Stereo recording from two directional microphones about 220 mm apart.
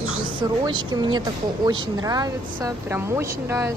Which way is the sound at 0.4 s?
20° right (ahead or behind).